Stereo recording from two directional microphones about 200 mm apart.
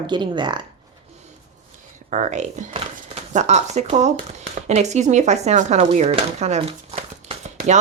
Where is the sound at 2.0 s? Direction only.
35° right (ahead or behind).